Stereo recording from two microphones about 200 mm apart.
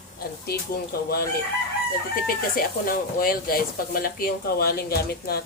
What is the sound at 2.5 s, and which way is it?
Speech, 45° left (ahead or behind).